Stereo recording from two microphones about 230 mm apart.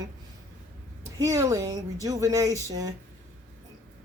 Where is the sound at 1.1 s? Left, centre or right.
Centre.